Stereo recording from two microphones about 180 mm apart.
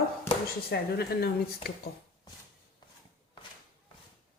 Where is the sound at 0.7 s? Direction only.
70° left (ahead or behind).